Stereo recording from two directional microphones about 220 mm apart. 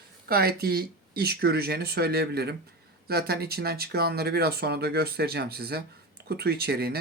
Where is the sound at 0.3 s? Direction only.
45° right (ahead or behind).